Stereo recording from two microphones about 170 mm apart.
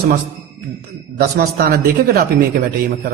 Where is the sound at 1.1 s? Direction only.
65° right (ahead or behind).